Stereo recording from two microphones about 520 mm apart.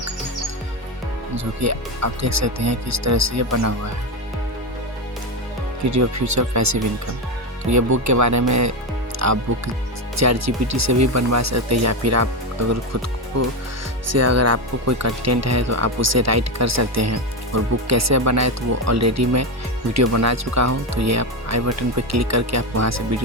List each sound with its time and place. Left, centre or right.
1.6 s speech: right
5.8 s speech: right
9.1 s music: right
10.2 s speech: right
14.1 s speech: right